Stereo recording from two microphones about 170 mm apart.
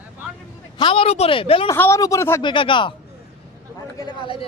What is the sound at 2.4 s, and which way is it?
Speech, 30° left (ahead or behind).